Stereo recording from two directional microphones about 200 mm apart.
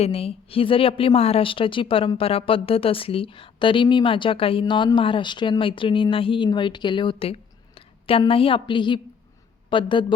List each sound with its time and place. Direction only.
0.0 s a woman's voice: 30° left (ahead or behind)